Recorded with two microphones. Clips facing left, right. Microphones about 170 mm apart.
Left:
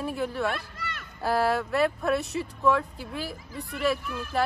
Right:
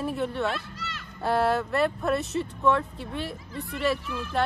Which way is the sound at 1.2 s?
Centre (ahead or behind).